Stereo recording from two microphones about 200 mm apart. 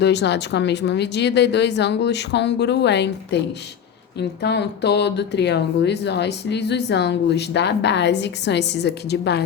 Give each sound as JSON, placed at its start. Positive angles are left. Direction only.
{"t": 0.0, "sound": "speech", "side_deg": 60}